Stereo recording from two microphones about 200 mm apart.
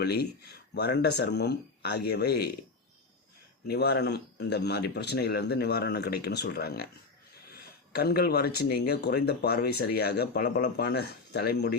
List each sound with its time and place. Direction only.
0.0 s speech: 55° left (ahead or behind)
3.7 s speech: 55° left (ahead or behind)
7.9 s speech: 50° left (ahead or behind)